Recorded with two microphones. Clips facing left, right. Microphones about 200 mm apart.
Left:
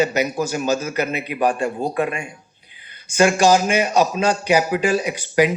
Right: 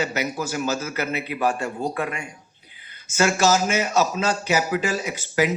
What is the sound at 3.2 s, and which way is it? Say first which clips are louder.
A man's voice: left 5 dB; 15° left (ahead or behind).